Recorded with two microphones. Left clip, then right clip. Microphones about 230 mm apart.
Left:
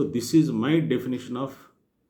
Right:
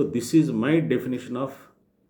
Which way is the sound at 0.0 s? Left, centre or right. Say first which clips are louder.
Right 1 dB; centre.